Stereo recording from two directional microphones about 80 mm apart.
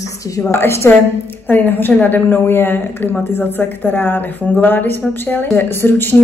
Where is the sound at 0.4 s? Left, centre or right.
Left.